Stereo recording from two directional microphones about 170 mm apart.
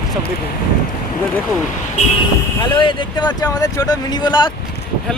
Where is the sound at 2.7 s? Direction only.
30° left (ahead or behind).